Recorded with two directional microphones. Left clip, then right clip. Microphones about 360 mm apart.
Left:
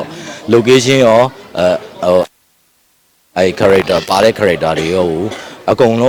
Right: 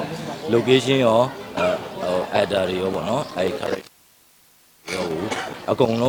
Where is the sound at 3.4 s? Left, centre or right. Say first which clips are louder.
Left 14 dB; left.